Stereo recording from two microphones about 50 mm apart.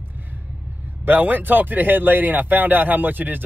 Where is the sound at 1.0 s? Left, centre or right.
Right.